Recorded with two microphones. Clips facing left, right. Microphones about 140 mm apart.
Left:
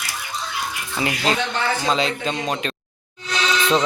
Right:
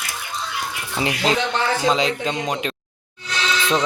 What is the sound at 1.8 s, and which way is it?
Speech, 20° right (ahead or behind).